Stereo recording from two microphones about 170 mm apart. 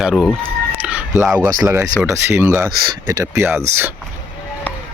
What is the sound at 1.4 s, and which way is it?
Speech, 20° right (ahead or behind).